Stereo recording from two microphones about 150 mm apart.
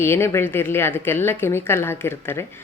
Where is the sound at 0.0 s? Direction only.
15° left (ahead or behind).